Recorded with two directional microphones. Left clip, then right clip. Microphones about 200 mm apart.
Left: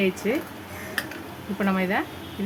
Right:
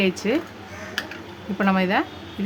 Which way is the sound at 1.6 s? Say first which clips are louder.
Right 4 dB; 35° right (ahead or behind).